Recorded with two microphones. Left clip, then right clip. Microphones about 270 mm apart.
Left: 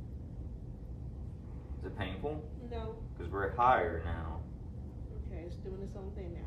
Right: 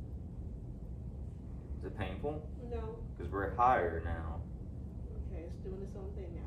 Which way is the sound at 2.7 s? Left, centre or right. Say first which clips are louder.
Even; centre.